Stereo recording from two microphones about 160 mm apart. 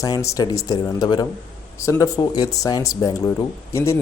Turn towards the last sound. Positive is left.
turn(degrees=15)  # may be behind; listen again after turning